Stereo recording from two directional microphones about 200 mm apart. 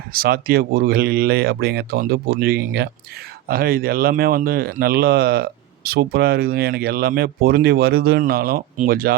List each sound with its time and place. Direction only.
0.1 s speech: 50° right (ahead or behind)